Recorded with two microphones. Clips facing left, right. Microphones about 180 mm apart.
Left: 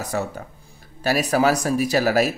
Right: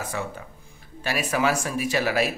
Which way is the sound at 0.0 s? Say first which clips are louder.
Left 5 dB; 40° left (ahead or behind).